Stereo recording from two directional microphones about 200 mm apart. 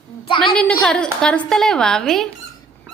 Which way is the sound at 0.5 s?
5° left (ahead or behind).